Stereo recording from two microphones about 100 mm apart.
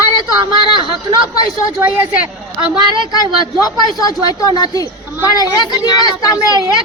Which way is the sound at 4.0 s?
40° left (ahead or behind).